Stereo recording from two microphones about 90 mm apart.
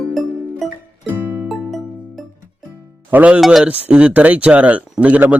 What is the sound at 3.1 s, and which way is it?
Speech, 15° right (ahead or behind).